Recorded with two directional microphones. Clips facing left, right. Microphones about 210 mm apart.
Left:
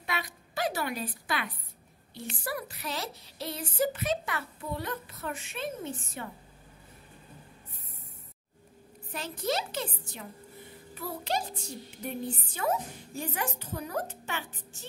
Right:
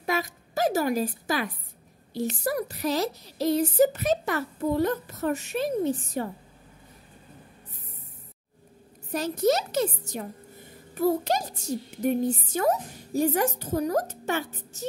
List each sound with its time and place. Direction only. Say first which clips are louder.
0.0 s a sound: right 8 dB; 45° right (ahead or behind)
2.1 s speech: right 9 dB; 40° right (ahead or behind)
9.1 s a child's voice: right 9 dB; 40° right (ahead or behind)